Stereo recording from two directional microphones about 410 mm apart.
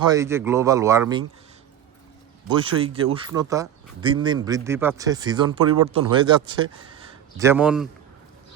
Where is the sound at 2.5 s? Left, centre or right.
Centre.